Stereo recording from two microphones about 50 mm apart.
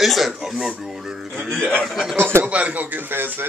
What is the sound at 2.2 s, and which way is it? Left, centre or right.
Speech, right.